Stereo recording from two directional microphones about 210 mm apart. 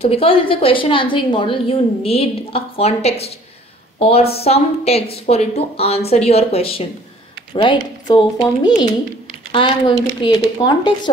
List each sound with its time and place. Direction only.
0.0 s a woman's voice: 25° left (ahead or behind)